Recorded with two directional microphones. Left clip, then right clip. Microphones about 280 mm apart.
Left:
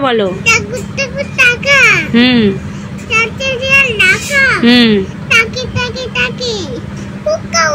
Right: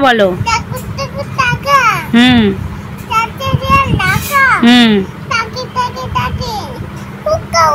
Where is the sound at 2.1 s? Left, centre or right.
Right.